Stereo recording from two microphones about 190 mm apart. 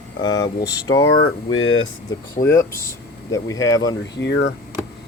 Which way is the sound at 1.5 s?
90° left.